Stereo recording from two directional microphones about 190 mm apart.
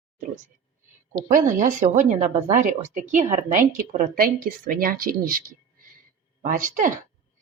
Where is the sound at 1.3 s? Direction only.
45° right (ahead or behind).